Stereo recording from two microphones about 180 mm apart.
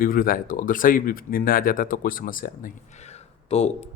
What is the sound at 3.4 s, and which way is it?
Speech, 35° left (ahead or behind).